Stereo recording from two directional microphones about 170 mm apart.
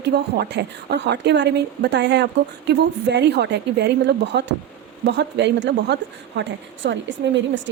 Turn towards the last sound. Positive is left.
turn(degrees=-90)